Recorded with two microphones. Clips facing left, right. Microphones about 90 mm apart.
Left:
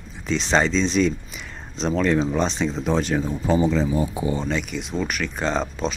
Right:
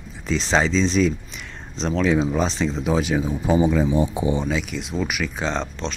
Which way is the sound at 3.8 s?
25° right (ahead or behind).